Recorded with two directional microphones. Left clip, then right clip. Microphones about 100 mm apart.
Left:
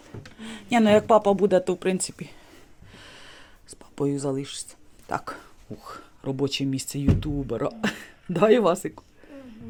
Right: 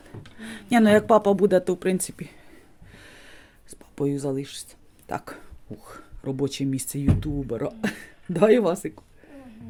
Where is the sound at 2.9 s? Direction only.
35° right (ahead or behind).